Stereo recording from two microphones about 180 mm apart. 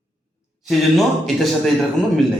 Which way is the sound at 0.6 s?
Centre (ahead or behind).